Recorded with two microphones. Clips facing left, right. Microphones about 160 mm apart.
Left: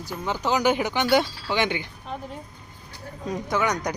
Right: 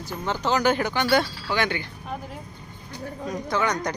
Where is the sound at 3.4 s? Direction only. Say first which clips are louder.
Even; 15° left (ahead or behind).